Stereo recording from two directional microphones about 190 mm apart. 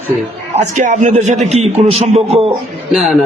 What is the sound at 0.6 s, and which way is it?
A man's voice, 40° right (ahead or behind).